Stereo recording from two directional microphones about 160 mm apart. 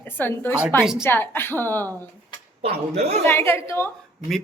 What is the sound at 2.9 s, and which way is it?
Speech, 40° right (ahead or behind).